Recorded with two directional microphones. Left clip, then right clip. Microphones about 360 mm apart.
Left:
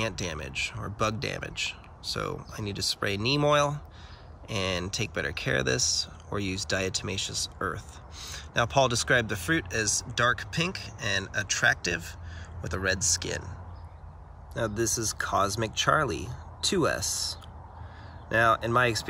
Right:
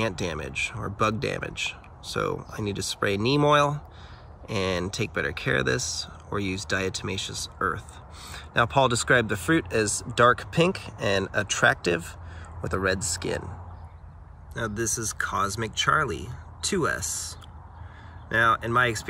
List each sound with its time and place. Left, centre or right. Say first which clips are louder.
0.0 s speech: right 4 dB; centre
14.5 s speech: even; centre